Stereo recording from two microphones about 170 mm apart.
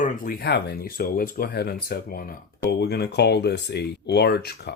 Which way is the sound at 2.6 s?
75° left (ahead or behind).